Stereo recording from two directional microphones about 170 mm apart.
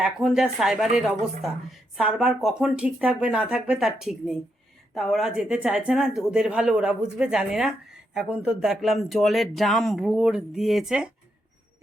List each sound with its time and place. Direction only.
0.0 s speech: 5° right (ahead or behind)